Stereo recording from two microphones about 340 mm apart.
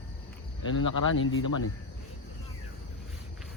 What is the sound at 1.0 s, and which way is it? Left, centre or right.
Speech, left.